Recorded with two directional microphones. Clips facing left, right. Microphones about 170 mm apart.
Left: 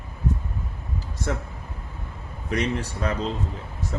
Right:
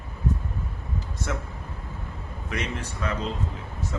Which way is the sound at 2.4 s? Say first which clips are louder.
Left 6 dB; 35° left (ahead or behind).